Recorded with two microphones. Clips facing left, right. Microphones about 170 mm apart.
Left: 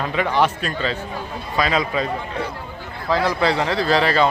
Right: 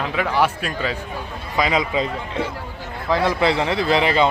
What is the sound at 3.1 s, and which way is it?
A man's voice, 20° right (ahead or behind).